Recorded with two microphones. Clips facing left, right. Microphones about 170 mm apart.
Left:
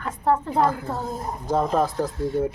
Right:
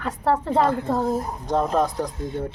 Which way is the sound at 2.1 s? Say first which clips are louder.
Left 4 dB; 20° right (ahead or behind).